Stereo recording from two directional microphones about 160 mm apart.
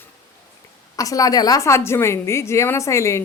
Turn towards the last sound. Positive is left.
turn(degrees=15)  # may be behind; listen again after turning